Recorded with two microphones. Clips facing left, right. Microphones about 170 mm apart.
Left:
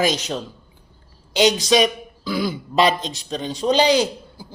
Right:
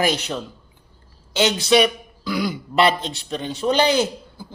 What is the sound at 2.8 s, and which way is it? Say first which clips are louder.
A man's voice: even; 15° left (ahead or behind).